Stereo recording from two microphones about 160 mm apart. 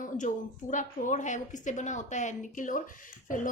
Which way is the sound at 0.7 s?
55° left (ahead or behind).